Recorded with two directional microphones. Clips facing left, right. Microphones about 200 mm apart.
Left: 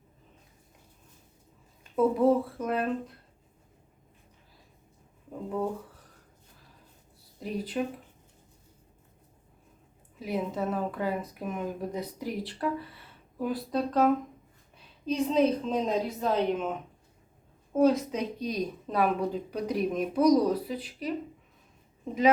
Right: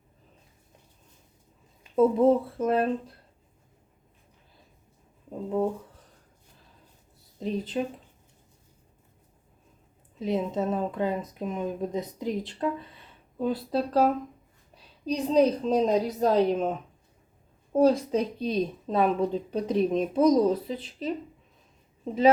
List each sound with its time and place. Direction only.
2.1 s speech: 25° right (ahead or behind)
7.3 s speech: 25° right (ahead or behind)
10.2 s a woman's voice: 25° right (ahead or behind)